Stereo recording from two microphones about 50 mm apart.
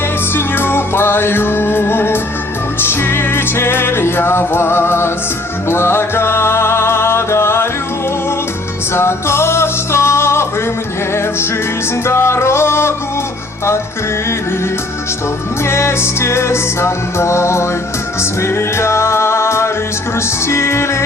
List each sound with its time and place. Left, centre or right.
0.3 s music: left
9.0 s music: left
12.0 s music: left
15.6 s music: left